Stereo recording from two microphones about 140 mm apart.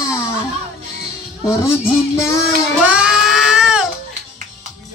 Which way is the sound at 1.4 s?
20° left (ahead or behind).